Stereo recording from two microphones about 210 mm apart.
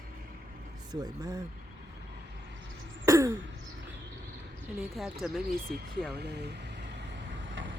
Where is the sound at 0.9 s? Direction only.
20° right (ahead or behind).